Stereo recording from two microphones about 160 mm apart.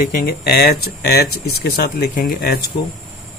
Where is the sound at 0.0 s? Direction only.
60° left (ahead or behind).